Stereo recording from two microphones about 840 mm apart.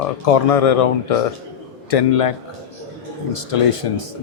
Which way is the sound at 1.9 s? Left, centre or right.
Left.